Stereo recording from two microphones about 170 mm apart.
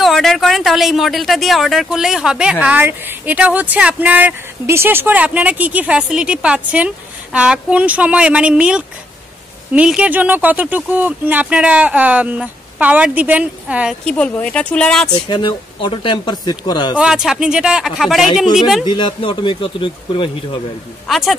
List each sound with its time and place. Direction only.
0.0 s speech: centre (ahead or behind)
14.0 s speech: 5° left (ahead or behind)
15.2 s speech: 25° left (ahead or behind)
16.9 s speech: 5° right (ahead or behind)
18.9 s speech: 25° left (ahead or behind)
21.1 s speech: centre (ahead or behind)